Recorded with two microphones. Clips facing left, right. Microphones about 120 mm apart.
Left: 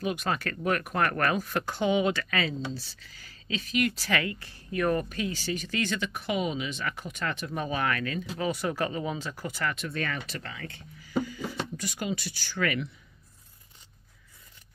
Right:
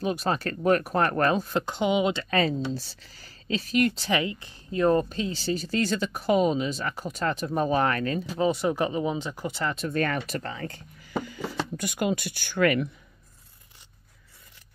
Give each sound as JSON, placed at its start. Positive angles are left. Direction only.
{"t": 0.0, "sound": "speech", "side_deg": -35}
{"t": 2.3, "sound": "speech", "side_deg": -40}
{"t": 3.9, "sound": "speech", "side_deg": -20}
{"t": 9.8, "sound": "speech", "side_deg": -45}
{"t": 11.1, "sound": "speech", "side_deg": -50}